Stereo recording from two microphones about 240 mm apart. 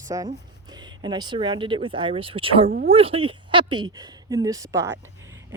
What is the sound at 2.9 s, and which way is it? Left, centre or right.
Speech, right.